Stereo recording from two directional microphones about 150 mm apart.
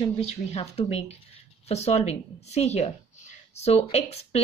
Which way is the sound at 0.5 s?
40° left (ahead or behind).